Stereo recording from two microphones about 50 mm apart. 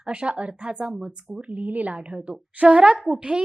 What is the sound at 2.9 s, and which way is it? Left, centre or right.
Speech, centre.